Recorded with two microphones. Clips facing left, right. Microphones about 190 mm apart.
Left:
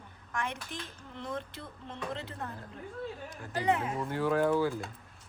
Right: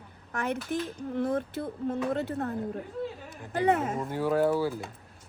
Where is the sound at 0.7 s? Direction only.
50° right (ahead or behind).